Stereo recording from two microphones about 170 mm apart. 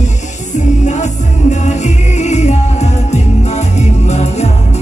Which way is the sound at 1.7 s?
40° left (ahead or behind).